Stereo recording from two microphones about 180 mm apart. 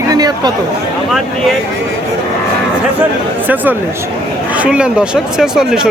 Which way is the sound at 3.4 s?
10° right (ahead or behind).